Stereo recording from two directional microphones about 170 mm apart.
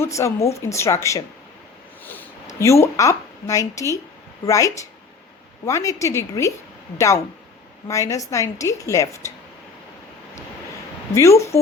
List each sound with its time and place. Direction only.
0.0 s a woman's voice: 15° left (ahead or behind)
2.6 s a woman's voice: 15° left (ahead or behind)
7.9 s a woman's voice: 20° left (ahead or behind)
11.1 s a woman's voice: 15° left (ahead or behind)